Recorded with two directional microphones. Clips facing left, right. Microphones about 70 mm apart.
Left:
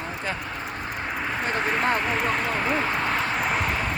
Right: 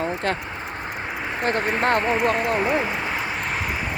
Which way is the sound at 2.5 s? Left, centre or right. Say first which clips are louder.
Right 3 dB; centre.